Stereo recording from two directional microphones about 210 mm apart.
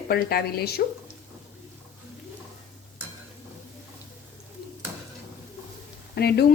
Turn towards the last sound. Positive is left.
turn(degrees=50)  # may be behind; listen again after turning